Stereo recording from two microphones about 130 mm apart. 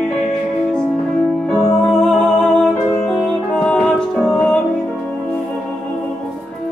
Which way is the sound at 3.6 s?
5° left (ahead or behind).